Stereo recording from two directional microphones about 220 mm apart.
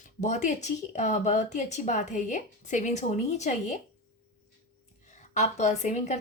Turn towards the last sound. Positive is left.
turn(degrees=30)  # may be behind; listen again after turning